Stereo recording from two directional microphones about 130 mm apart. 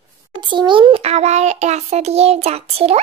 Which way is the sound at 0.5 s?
40° right (ahead or behind).